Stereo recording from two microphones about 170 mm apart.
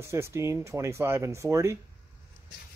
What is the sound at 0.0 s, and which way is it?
Speech, 15° right (ahead or behind).